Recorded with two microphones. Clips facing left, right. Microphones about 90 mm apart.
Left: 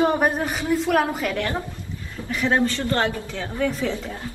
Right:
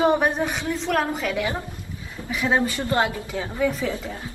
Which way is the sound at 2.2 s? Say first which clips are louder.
Left 1 dB; 10° right (ahead or behind).